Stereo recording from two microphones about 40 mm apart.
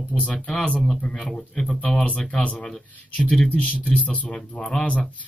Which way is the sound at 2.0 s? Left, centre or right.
Left.